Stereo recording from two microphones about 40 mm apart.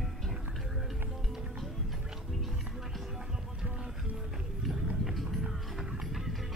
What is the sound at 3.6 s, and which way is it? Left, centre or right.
Music, centre.